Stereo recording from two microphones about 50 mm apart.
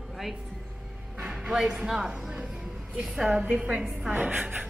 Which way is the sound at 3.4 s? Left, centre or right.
Right.